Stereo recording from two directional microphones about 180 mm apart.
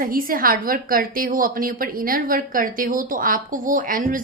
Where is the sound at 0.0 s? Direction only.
50° right (ahead or behind).